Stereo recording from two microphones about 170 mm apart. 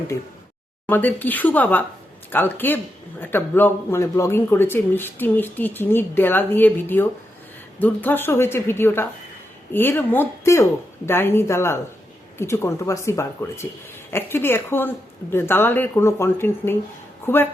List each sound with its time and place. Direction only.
0.9 s speech: 10° left (ahead or behind)